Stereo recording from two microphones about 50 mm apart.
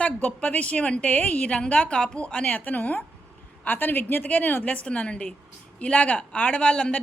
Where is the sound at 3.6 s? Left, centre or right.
Left.